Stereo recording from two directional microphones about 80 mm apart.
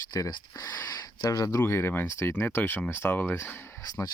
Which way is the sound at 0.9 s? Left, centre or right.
Left.